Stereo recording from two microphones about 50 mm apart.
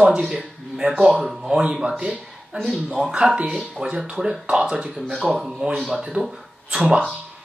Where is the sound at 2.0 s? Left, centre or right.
Right.